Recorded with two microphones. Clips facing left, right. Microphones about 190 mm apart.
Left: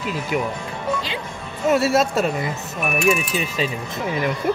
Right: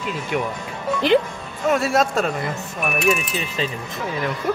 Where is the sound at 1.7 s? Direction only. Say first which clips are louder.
Left 1 dB; 5° left (ahead or behind).